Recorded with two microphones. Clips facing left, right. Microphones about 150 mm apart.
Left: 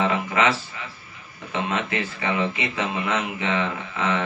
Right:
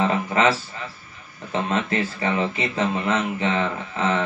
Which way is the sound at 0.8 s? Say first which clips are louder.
Right 3 dB; 35° right (ahead or behind).